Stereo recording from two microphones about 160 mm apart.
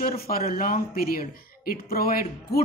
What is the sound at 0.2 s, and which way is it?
Speech, 65° left (ahead or behind).